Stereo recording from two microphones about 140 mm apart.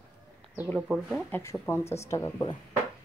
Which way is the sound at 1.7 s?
20° left (ahead or behind).